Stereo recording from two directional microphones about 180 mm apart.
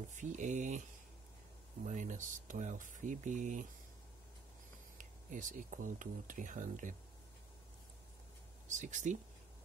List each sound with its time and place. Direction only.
0.1 s speech: 45° right (ahead or behind)
1.9 s speech: 45° right (ahead or behind)
4.9 s speech: 45° right (ahead or behind)
8.6 s speech: 40° right (ahead or behind)